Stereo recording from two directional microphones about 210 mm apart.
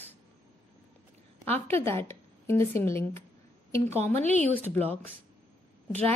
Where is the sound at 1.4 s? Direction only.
10° left (ahead or behind).